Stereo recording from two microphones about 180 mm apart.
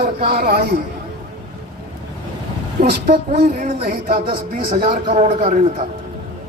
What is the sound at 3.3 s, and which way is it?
Music, 40° right (ahead or behind).